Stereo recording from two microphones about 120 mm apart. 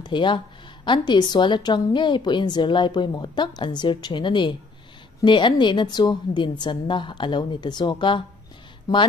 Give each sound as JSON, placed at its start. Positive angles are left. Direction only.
{"t": 0.0, "sound": "a woman's voice", "side_deg": 40}